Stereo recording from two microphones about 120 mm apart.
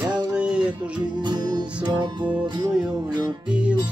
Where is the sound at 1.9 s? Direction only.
35° right (ahead or behind).